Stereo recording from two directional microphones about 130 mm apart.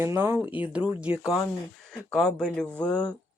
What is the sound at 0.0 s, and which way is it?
Speech, 20° right (ahead or behind).